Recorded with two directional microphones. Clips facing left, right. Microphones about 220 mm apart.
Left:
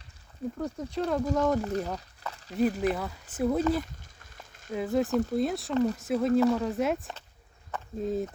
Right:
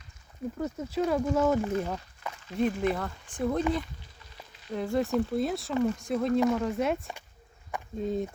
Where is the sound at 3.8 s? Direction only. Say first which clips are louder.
Left 1 dB; 45° left (ahead or behind).